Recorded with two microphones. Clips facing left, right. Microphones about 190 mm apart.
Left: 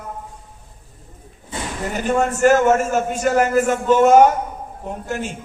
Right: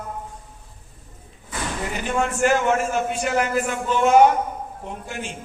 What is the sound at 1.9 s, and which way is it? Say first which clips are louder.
A man's voice: left 5 dB; 40° left (ahead or behind).